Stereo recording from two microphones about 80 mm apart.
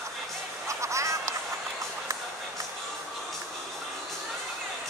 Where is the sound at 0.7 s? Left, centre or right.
Right.